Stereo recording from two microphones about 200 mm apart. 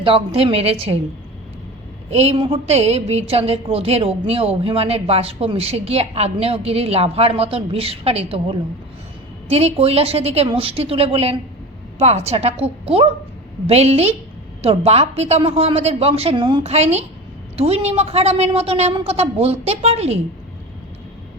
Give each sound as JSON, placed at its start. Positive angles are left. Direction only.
{"t": 0.0, "sound": "a woman's voice", "side_deg": -25}
{"t": 2.0, "sound": "a woman's voice", "side_deg": -30}